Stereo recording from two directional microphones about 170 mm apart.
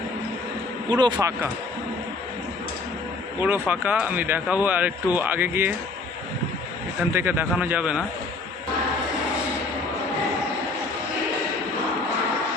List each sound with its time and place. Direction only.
0.9 s speech: 25° right (ahead or behind)
3.4 s speech: 10° right (ahead or behind)
7.1 s speech: 15° right (ahead or behind)